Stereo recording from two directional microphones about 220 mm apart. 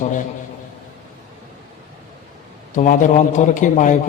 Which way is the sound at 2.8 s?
35° left (ahead or behind).